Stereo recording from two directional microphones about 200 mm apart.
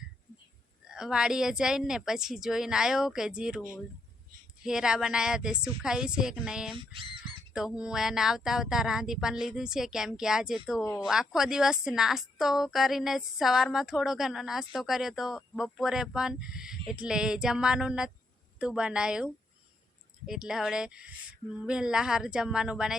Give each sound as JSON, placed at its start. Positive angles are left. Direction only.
{"t": 0.9, "sound": "speech", "side_deg": -5}
{"t": 4.6, "sound": "speech", "side_deg": -5}
{"t": 6.7, "sound": "speech", "side_deg": -25}
{"t": 7.5, "sound": "speech", "side_deg": -5}